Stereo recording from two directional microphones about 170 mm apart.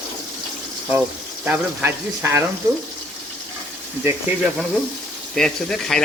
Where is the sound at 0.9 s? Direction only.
10° right (ahead or behind).